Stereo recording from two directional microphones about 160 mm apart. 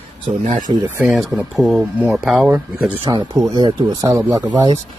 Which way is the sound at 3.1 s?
25° right (ahead or behind).